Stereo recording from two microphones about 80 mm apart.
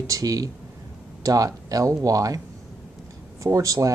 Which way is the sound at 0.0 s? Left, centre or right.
Right.